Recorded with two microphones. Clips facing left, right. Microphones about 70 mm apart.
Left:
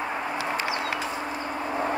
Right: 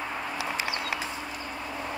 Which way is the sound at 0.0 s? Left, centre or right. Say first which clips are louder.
Left 4 dB; left.